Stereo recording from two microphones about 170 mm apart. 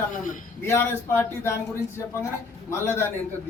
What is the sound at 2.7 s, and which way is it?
Speech, 15° left (ahead or behind).